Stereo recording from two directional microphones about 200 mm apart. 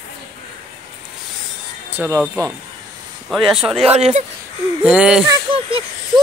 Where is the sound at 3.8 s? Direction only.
30° right (ahead or behind).